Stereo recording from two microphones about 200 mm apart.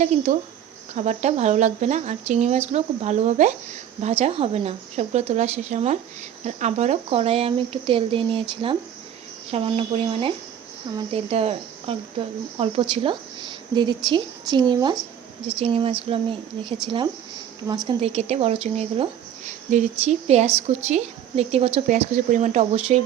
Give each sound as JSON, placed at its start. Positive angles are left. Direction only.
{"t": 0.0, "sound": "a woman's voice", "side_deg": -35}
{"t": 17.8, "sound": "speech", "side_deg": -30}